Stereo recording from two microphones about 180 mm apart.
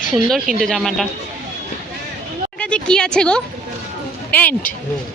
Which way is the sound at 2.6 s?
5° left (ahead or behind).